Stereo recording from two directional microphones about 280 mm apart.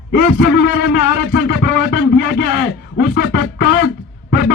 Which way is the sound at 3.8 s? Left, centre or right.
Left.